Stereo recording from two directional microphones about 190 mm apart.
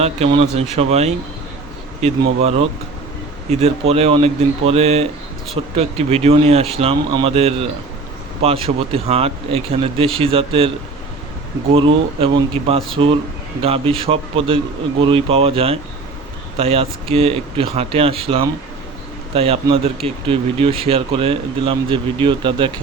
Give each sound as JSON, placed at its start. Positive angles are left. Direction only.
{"t": 0.0, "sound": "speech", "side_deg": -30}
{"t": 11.7, "sound": "a man's voice", "side_deg": -30}